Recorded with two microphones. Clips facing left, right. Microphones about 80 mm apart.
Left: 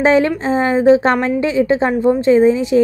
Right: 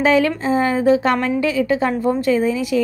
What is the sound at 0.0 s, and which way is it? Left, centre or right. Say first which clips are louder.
A woman's voice: left 3 dB; left.